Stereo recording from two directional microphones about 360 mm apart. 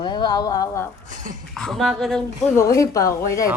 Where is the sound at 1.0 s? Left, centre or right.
Right.